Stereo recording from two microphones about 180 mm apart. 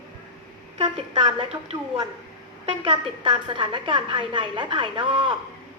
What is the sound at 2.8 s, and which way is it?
A woman's voice, 25° right (ahead or behind).